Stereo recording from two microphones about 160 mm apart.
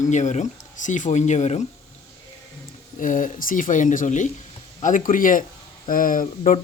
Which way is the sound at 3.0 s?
55° left (ahead or behind).